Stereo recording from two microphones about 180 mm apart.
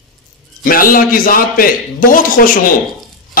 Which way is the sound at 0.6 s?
50° left (ahead or behind).